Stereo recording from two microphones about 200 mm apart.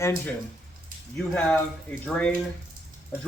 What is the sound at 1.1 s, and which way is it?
Speech, 5° left (ahead or behind).